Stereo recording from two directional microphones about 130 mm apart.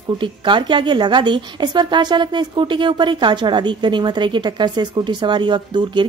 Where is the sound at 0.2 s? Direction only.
40° right (ahead or behind).